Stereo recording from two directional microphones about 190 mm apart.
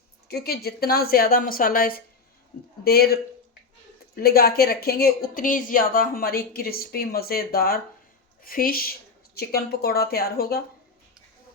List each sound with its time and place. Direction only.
0.3 s a woman's voice: 55° left (ahead or behind)